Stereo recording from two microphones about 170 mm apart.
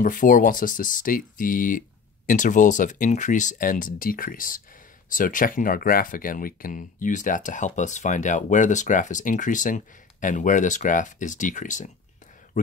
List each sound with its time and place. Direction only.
0.0 s speech: 50° left (ahead or behind)